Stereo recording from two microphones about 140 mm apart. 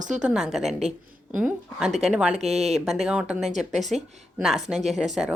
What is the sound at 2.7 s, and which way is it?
A woman's voice, centre (ahead or behind).